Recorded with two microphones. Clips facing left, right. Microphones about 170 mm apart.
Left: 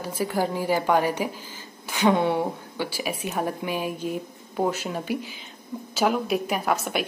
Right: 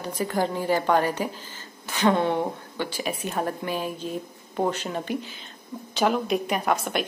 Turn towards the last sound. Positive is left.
turn(degrees=5)  # may be behind; listen again after turning